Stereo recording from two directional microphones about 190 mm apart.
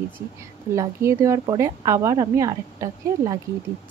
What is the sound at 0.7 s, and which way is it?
A woman's voice, 15° right (ahead or behind).